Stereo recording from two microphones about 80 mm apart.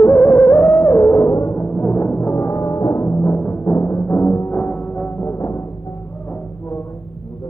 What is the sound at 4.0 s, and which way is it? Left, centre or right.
Timpani, left.